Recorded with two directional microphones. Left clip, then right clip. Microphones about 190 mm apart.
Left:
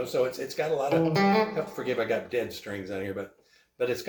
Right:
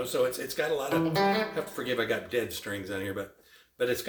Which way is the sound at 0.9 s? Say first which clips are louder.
Left 3 dB; 10° left (ahead or behind).